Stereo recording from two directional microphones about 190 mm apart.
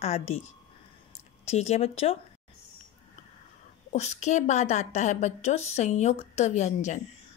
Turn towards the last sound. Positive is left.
turn(degrees=40)  # may be behind; listen again after turning